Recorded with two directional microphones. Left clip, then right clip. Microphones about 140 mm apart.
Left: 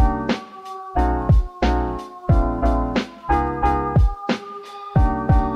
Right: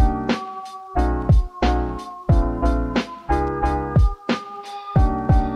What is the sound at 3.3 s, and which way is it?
Music, 15° left (ahead or behind).